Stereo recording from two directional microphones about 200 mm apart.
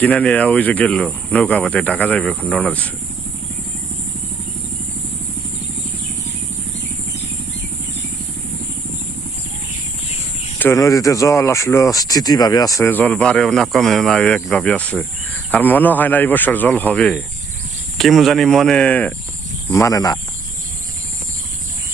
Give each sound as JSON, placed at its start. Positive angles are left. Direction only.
{"t": 0.0, "sound": "speech", "side_deg": 5}
{"t": 10.6, "sound": "speech", "side_deg": 15}